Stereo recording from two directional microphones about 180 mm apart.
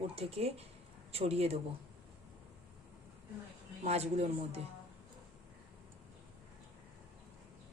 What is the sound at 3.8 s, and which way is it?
Speech, 35° right (ahead or behind).